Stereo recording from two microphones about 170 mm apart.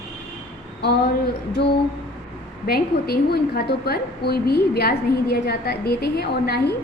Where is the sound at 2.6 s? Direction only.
70° left (ahead or behind).